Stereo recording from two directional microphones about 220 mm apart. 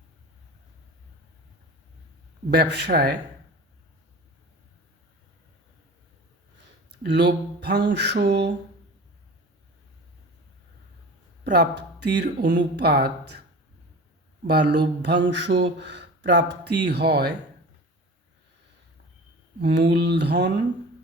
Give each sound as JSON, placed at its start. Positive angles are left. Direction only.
{"t": 2.5, "sound": "speech", "side_deg": -50}
{"t": 7.0, "sound": "speech", "side_deg": -50}
{"t": 11.4, "sound": "speech", "side_deg": -50}
{"t": 14.4, "sound": "speech", "side_deg": -50}
{"t": 19.5, "sound": "speech", "side_deg": -50}